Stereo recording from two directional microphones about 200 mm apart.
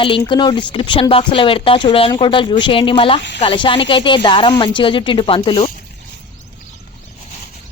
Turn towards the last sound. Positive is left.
turn(degrees=25)  # may be behind; listen again after turning